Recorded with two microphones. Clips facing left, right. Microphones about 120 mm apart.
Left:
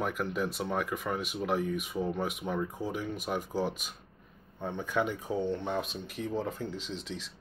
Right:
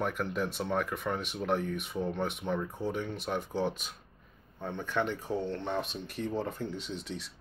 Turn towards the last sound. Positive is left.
turn(degrees=0)  # may be behind; listen again after turning